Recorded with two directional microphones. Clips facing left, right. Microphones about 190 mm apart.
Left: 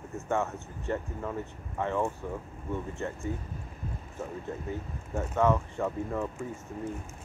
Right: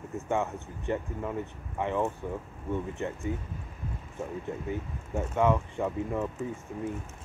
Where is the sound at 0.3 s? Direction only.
15° right (ahead or behind).